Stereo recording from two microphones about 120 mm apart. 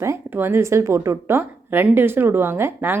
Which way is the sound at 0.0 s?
20° right (ahead or behind).